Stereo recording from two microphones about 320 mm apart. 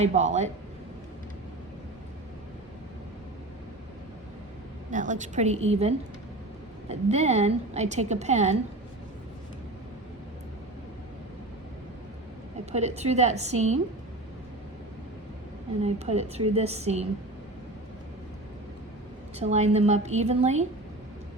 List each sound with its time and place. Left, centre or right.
0.0 s a woman's voice: right
4.9 s a woman's voice: right
13.0 s a woman's voice: right
15.8 s a woman's voice: centre
19.4 s a woman's voice: right